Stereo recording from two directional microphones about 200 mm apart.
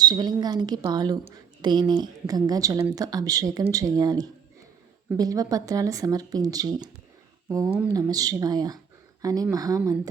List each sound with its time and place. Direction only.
0.0 s a woman's voice: 20° right (ahead or behind)